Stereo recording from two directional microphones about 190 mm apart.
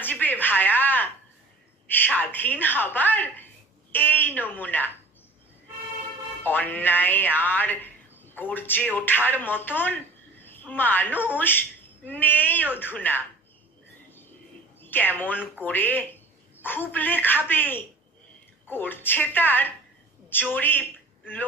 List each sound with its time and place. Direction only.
0.0 s a sound: 10° left (ahead or behind)
1.9 s a woman's voice: 10° left (ahead or behind)
6.4 s speech: 10° left (ahead or behind)
14.8 s a woman's voice: 10° left (ahead or behind)